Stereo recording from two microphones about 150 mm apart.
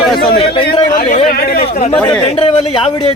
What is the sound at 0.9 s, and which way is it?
Speech, 60° left (ahead or behind).